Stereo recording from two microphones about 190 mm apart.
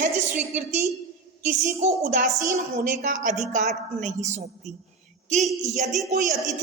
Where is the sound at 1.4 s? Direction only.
40° right (ahead or behind).